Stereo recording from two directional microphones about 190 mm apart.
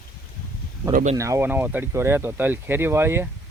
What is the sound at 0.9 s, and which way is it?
Speech, 45° right (ahead or behind).